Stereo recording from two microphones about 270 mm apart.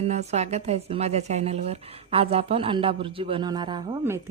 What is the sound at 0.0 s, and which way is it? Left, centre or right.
A woman's voice, right.